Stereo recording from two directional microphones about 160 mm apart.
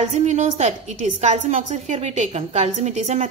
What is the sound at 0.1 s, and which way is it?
A woman's voice, 45° right (ahead or behind).